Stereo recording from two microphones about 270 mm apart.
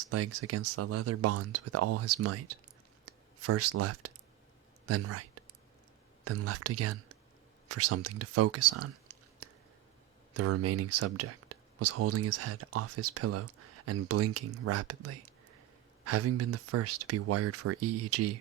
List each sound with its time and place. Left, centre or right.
0.1 s speech: right
3.4 s speech: right
10.3 s speech: right